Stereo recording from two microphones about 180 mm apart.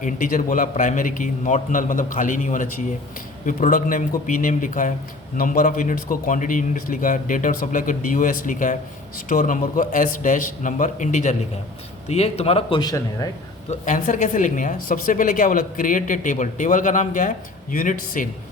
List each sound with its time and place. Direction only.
0.0 s a man's voice: 50° left (ahead or behind)
12.8 s speech: 20° left (ahead or behind)
13.7 s speech: 45° left (ahead or behind)